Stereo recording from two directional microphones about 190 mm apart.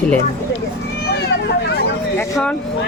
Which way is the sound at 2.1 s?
15° left (ahead or behind).